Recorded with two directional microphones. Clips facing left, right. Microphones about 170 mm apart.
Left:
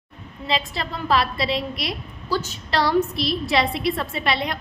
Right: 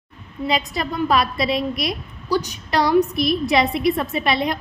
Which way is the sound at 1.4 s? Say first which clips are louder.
Right 4 dB; 25° left (ahead or behind).